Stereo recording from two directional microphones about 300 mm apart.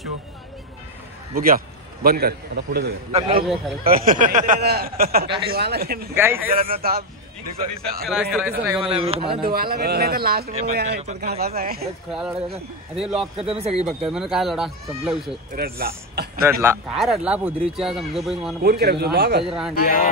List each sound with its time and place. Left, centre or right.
1.3 s a man's voice: right
6.1 s speech: centre
6.5 s speech: right
8.1 s speech: centre
8.9 s speech: centre
9.5 s a man's voice: right
12.1 s speech: centre
13.4 s speech: centre
13.8 s speech: centre
15.5 s a man's voice: right
16.4 s speech: centre
18.6 s a man's voice: right
19.4 s speech: centre
19.7 s speech: left